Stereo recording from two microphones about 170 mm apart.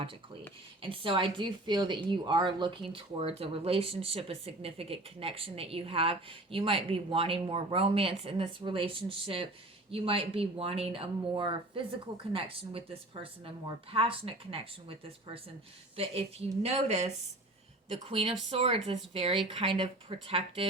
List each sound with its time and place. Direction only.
0.8 s speech: 30° right (ahead or behind)